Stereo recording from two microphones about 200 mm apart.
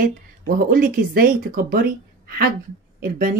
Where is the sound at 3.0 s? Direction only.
45° right (ahead or behind).